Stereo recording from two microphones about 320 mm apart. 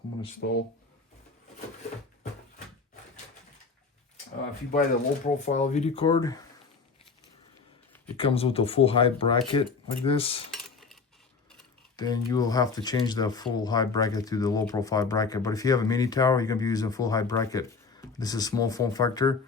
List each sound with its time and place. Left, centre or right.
0.3 s speech: left
4.7 s speech: left
8.1 s speech: centre
10.5 s cutlery: centre
11.9 s speech: centre